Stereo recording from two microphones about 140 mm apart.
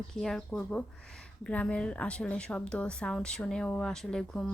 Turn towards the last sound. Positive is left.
turn(degrees=5)  # may be behind; listen again after turning